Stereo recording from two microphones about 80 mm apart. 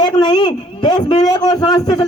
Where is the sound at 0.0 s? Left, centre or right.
Left.